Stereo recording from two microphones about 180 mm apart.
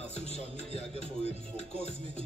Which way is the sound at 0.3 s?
35° left (ahead or behind).